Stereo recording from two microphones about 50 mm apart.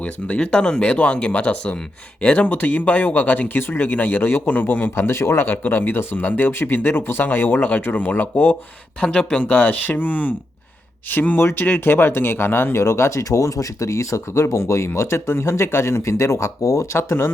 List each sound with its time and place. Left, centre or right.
0.3 s speech: centre; by 8.5 s left
9.0 s speech: left
11.3 s speech: left
12.8 s speech: left
14.8 s speech: left